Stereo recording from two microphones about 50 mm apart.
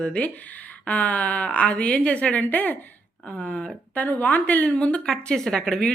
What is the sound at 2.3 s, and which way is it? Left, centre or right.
A woman's voice, left.